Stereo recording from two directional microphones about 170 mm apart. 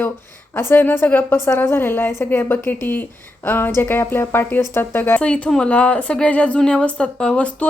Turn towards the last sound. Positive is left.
turn(degrees=5)  # may be behind; listen again after turning